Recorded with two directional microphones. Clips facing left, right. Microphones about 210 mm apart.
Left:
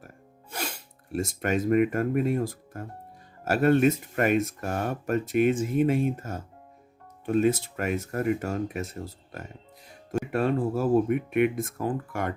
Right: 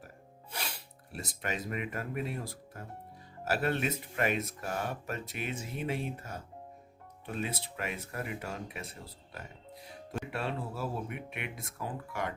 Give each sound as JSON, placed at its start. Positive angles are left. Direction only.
{"t": 0.5, "sound": "speech", "side_deg": 45}